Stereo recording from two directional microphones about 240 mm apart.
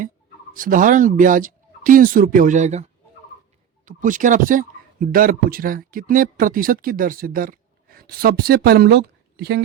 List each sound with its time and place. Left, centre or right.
0.5 s speech: right
3.8 s speech: right